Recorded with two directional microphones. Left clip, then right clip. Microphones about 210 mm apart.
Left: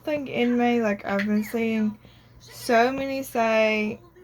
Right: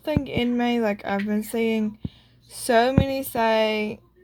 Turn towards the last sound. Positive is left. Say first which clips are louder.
# even
turn(degrees=-55)  # may be behind; listen again after turning